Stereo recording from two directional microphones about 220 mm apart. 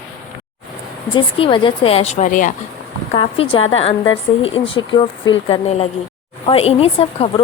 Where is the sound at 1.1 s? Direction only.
20° left (ahead or behind).